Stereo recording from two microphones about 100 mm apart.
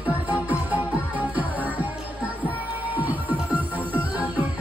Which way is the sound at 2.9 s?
15° right (ahead or behind).